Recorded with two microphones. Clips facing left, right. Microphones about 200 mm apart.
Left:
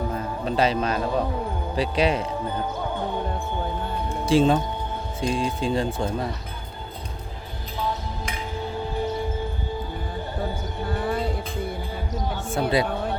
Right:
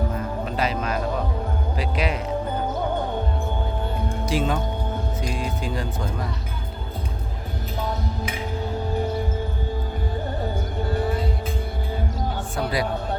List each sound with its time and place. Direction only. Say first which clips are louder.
0.4 s a man's voice: left 6 dB; 30° left (ahead or behind)
4.3 s speech: left 6 dB; 30° left (ahead or behind)
12.5 s speech: left 4 dB; 25° left (ahead or behind)